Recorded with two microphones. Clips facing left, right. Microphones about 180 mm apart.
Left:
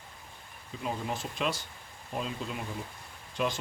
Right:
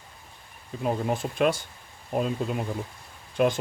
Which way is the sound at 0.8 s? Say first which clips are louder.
Right 8 dB; 50° right (ahead or behind).